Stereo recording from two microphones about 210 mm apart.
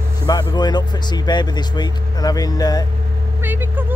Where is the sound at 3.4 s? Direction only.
10° right (ahead or behind).